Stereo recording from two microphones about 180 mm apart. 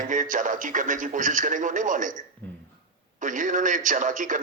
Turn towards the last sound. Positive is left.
turn(degrees=-45)  # may be behind; listen again after turning